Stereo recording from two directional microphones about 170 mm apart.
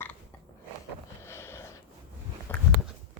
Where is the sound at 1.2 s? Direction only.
15° left (ahead or behind).